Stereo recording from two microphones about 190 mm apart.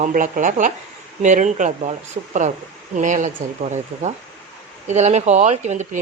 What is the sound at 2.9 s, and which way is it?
Speech, 40° right (ahead or behind).